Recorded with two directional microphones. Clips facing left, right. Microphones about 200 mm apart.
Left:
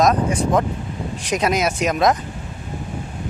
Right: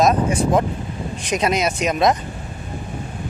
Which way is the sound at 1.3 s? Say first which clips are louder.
Even; 5° left (ahead or behind).